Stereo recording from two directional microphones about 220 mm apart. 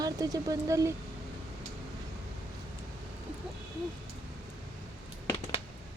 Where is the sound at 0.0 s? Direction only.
15° right (ahead or behind).